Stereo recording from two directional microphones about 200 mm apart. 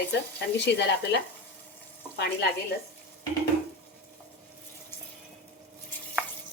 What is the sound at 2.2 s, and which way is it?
Speech, 55° left (ahead or behind).